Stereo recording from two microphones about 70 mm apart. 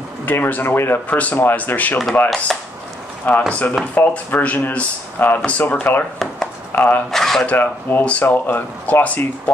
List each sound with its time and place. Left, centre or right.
0.2 s speech: left
2.2 s speech: centre
3.3 s speech: left
7.1 s speech: centre
7.5 s speech: left